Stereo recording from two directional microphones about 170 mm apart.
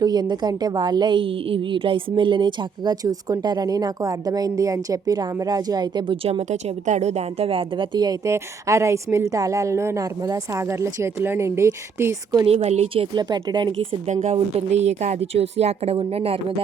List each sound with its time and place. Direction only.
0.0 s a woman's voice: 25° right (ahead or behind)
6.5 s speech: 45° right (ahead or behind); by 12.5 s 15° right (ahead or behind)
12.5 s a woman's voice: 35° right (ahead or behind)
14.1 s a woman's voice: 45° right (ahead or behind)